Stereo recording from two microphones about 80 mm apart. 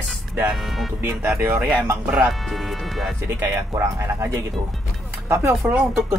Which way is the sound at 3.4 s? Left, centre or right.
Right.